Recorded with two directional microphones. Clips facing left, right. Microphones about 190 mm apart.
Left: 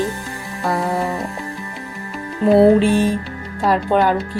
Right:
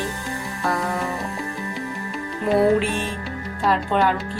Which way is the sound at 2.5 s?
30° left (ahead or behind).